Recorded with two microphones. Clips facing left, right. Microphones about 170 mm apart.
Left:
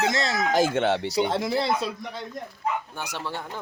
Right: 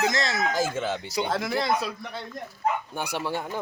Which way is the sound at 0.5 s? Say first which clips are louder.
Left 5 dB; 70° left (ahead or behind).